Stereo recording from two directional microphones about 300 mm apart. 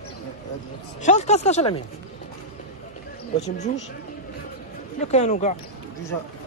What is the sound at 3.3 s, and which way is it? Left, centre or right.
Speech, left.